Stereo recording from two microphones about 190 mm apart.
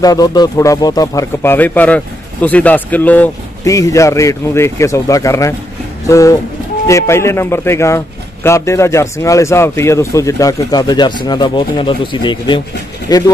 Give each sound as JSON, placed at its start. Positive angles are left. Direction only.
{"t": 0.0, "sound": "speech", "side_deg": 20}